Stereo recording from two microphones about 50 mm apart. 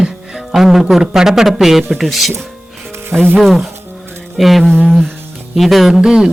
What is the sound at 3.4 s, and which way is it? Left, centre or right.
A man's voice, centre.